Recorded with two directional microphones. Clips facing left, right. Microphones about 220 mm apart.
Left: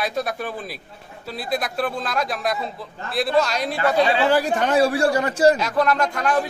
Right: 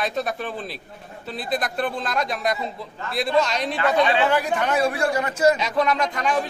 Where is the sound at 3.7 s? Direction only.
35° left (ahead or behind).